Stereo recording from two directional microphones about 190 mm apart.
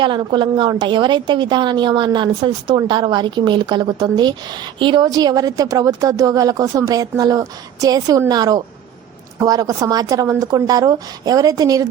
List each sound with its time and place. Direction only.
0.0 s a woman's voice: 25° right (ahead or behind)